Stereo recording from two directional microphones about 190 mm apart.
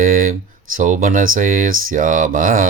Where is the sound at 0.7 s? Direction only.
45° right (ahead or behind).